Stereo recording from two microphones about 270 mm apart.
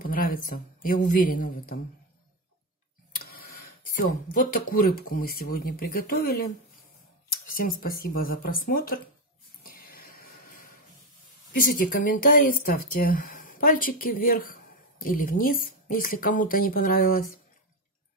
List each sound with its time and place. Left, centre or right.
0.0 s a sound: left
0.5 s speech: left
3.2 s tick-tock: left
4.0 s speech: left
7.4 s speech: left
9.6 s a sound: left
11.5 s speech: left